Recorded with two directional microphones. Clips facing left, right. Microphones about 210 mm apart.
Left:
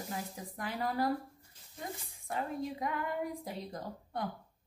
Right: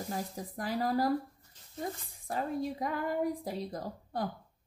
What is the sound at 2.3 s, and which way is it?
A woman's voice, 35° right (ahead or behind).